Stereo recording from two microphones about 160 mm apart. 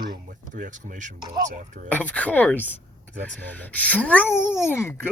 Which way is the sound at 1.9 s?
10° left (ahead or behind).